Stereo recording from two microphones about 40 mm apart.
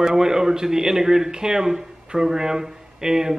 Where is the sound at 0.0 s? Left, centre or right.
Centre.